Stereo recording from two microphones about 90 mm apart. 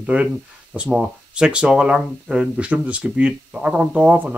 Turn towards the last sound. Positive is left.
turn(degrees=-15)  # may be behind; listen again after turning